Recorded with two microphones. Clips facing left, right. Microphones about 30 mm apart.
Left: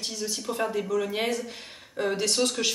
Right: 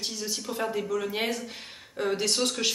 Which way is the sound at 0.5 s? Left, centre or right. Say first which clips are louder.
Left 2 dB; centre.